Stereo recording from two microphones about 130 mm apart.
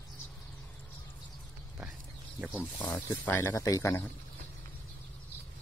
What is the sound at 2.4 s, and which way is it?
Speech, 5° right (ahead or behind).